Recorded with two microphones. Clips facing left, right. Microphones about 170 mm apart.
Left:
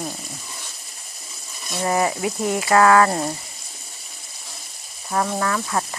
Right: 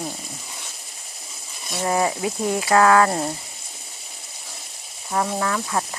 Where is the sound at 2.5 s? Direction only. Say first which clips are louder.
Even; 15° left (ahead or behind).